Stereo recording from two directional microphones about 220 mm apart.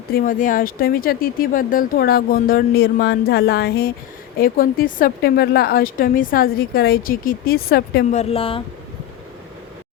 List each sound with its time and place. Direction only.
0.1 s speech: 40° left (ahead or behind)
8.1 s speech: 25° left (ahead or behind)